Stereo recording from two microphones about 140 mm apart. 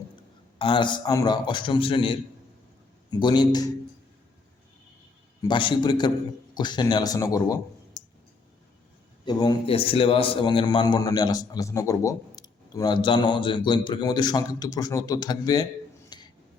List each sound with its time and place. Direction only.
0.6 s a man's voice: 35° left (ahead or behind)
5.4 s a man's voice: 35° left (ahead or behind)
9.2 s a man's voice: 30° left (ahead or behind)
9.6 s a man's voice: 40° left (ahead or behind)
16.1 s a sound: 30° left (ahead or behind)